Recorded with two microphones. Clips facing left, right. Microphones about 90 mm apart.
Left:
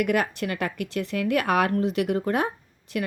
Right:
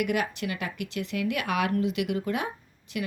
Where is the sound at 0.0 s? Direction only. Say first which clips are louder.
Left 4 dB; 45° left (ahead or behind).